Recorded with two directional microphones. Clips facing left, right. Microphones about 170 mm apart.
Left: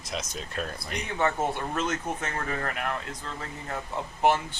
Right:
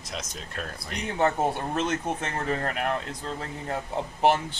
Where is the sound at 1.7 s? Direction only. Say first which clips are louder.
Right 2 dB; 30° right (ahead or behind).